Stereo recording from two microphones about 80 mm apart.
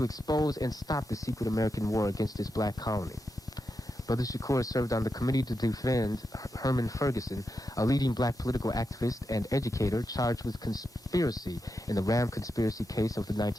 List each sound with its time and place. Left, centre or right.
0.0 s speech: left
4.1 s speech: left